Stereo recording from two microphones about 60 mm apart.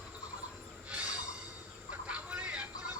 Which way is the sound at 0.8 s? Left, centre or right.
Centre.